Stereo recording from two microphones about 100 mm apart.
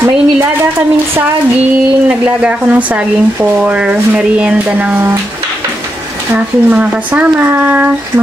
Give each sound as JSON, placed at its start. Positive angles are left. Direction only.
{"t": 0.0, "sound": "a woman's voice", "side_deg": -25}
{"t": 2.0, "sound": "speech", "side_deg": -10}
{"t": 6.3, "sound": "speech", "side_deg": -15}